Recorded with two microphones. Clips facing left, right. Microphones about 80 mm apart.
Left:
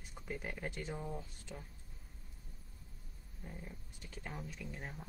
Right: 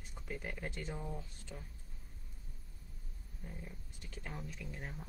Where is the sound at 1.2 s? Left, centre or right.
Centre.